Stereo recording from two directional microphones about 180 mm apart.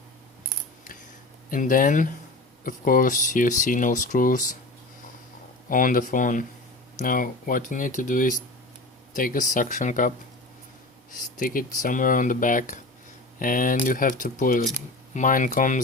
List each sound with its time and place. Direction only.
1.5 s speech: 50° left (ahead or behind)
5.6 s speech: 50° left (ahead or behind)
11.1 s speech: 45° left (ahead or behind)